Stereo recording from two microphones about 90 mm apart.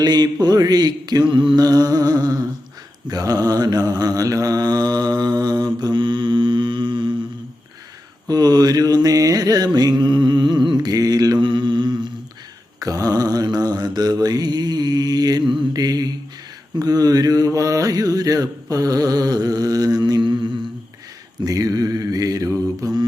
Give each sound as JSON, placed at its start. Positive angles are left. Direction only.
{"t": 0.0, "sound": "mantra", "side_deg": -50}
{"t": 8.3, "sound": "mantra", "side_deg": -45}
{"t": 10.0, "sound": "a sound", "side_deg": -60}
{"t": 11.3, "sound": "mantra", "side_deg": -60}
{"t": 12.8, "sound": "mantra", "side_deg": -45}
{"t": 21.4, "sound": "mantra", "side_deg": -45}